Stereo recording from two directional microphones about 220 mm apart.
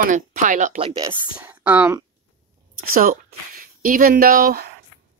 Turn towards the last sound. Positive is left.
turn(degrees=-40)  # may be behind; listen again after turning